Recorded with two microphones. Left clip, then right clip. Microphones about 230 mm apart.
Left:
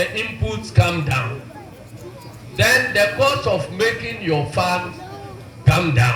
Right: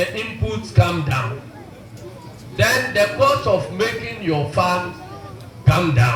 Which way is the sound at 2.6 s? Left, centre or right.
Left.